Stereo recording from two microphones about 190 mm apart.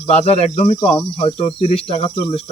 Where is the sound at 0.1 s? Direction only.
35° left (ahead or behind).